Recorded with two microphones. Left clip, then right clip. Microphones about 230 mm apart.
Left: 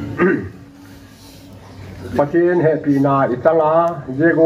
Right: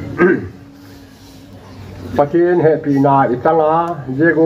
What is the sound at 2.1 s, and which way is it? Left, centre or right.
Speech, right.